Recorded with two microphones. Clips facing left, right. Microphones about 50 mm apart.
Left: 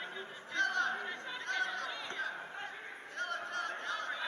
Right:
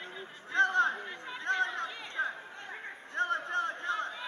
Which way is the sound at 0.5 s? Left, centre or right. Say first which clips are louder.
Right 6 dB; right.